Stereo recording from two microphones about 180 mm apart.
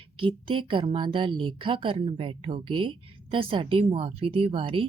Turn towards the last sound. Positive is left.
turn(degrees=-30)  # may be behind; listen again after turning